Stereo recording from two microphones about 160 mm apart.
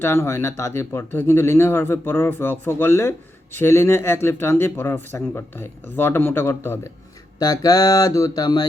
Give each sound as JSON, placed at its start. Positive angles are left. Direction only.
{"t": 0.0, "sound": "speech", "side_deg": 15}
{"t": 7.3, "sound": "mantra", "side_deg": 25}